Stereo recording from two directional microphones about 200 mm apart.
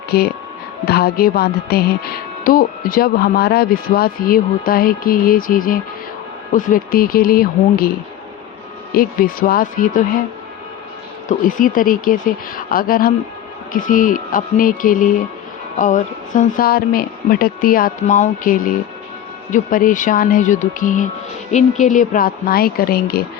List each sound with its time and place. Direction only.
0.1 s speech: 50° left (ahead or behind)
9.0 s speech: 45° left (ahead or behind)
11.3 s speech: 45° left (ahead or behind)